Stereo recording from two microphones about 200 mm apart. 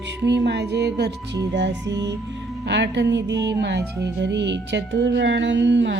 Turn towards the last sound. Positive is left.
turn(degrees=-60)  # may be behind; listen again after turning